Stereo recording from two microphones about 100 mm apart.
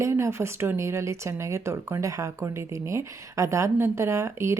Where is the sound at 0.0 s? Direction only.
25° right (ahead or behind).